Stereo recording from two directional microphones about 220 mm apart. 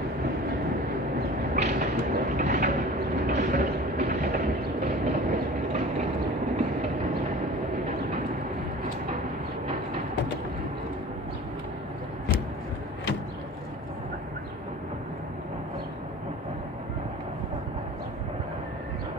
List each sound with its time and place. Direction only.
1.5 s vehicle: 40° right (ahead or behind)
3.3 s train: 40° right (ahead or behind)